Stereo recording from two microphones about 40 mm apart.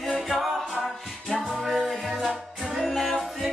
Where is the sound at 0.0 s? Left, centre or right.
Centre.